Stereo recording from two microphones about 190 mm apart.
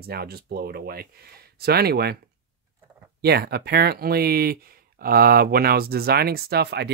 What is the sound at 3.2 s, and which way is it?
Speech, 55° right (ahead or behind).